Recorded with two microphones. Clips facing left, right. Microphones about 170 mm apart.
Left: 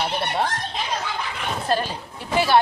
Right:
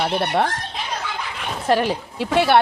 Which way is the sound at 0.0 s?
60° right (ahead or behind).